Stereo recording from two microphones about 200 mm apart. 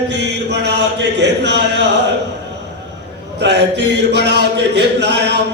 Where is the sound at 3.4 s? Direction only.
60° right (ahead or behind).